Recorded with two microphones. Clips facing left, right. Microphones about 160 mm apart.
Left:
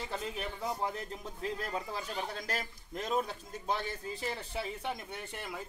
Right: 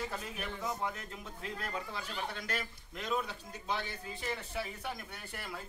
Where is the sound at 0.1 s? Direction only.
30° left (ahead or behind).